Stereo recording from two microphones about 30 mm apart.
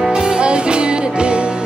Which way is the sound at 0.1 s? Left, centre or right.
Right.